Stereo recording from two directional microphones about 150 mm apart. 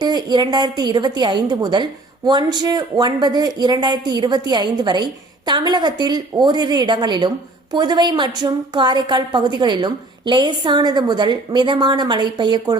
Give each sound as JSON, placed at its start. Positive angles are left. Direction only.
{"t": 0.0, "sound": "a woman's voice", "side_deg": -30}